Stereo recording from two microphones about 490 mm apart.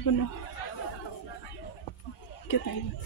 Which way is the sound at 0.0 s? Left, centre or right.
Left.